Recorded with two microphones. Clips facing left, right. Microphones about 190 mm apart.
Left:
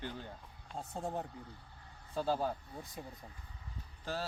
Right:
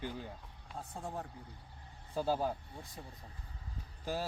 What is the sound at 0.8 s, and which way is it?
Speech, 25° left (ahead or behind).